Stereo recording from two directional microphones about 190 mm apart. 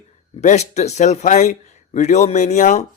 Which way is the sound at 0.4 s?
35° left (ahead or behind).